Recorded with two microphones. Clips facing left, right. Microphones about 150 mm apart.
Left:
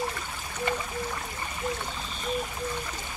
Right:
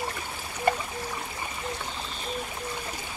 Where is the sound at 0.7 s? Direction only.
45° right (ahead or behind).